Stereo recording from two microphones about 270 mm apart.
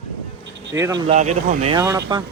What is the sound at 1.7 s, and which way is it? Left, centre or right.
Speech, centre.